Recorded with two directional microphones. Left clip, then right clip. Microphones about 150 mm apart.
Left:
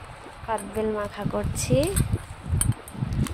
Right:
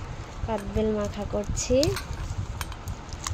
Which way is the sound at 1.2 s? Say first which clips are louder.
Left 1 dB; centre (ahead or behind).